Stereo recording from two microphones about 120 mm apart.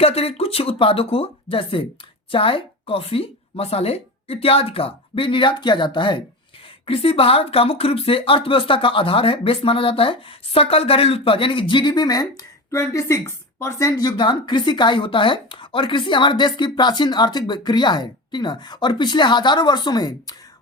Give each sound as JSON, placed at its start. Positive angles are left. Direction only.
{"t": 0.0, "sound": "a woman's voice", "side_deg": 55}
{"t": 6.8, "sound": "speech", "side_deg": 50}